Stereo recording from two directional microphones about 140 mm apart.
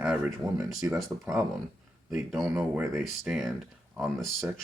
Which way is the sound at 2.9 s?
Centre (ahead or behind).